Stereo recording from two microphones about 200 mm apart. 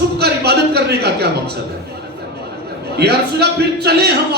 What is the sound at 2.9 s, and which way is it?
Speech, 55° right (ahead or behind).